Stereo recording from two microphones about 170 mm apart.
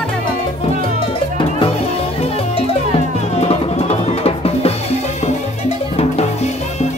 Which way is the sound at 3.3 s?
40° left (ahead or behind).